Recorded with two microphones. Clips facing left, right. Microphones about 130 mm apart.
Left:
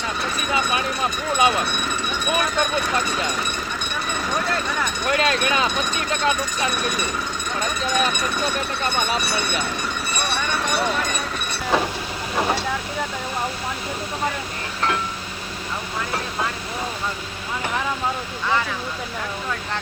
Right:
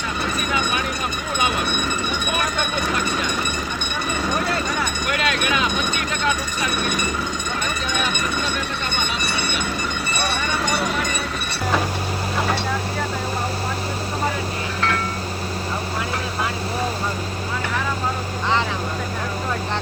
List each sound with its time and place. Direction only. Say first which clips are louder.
5.0 s speech: left 4 dB; 30° left (ahead or behind)